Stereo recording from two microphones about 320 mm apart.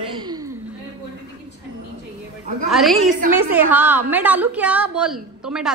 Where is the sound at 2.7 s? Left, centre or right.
Centre.